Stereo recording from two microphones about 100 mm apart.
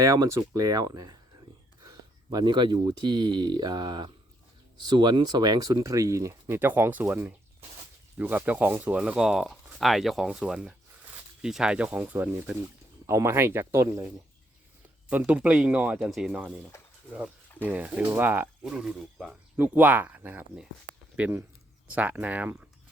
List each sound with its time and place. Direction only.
0.0 s speech: 35° right (ahead or behind); by 12.5 s 20° right (ahead or behind)
12.6 s speech: 30° right (ahead or behind)
15.1 s speech: 15° right (ahead or behind)
16.0 s speech: 5° right (ahead or behind)
18.6 s speech: 5° right (ahead or behind)
19.5 s speech: 15° right (ahead or behind)